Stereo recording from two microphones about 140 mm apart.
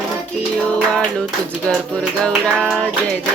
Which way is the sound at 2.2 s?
5° left (ahead or behind).